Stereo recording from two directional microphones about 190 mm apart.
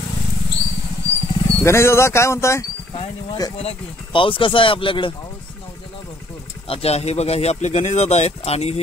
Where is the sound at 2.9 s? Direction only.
30° left (ahead or behind).